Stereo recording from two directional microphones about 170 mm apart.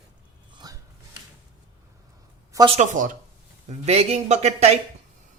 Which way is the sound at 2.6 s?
40° right (ahead or behind).